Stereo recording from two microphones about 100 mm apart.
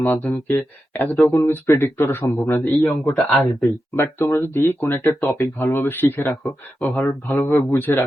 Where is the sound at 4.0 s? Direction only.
25° left (ahead or behind).